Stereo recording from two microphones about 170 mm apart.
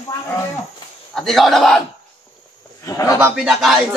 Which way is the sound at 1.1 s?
Centre (ahead or behind).